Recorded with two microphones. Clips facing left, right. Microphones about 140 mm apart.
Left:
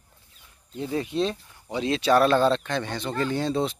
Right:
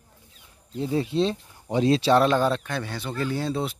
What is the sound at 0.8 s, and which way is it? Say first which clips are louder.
Speech: right 2 dB; 25° right (ahead or behind).